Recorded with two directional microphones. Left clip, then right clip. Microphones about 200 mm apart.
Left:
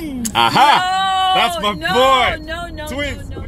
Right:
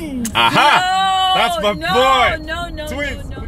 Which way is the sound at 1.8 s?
25° right (ahead or behind).